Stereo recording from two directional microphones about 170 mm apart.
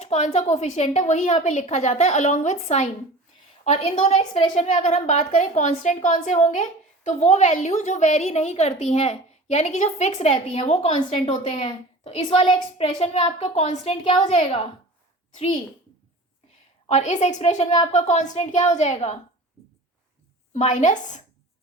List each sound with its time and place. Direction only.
0.0 s a woman's voice: 40° left (ahead or behind)
16.9 s a woman's voice: 45° left (ahead or behind)
20.5 s a woman's voice: 45° left (ahead or behind)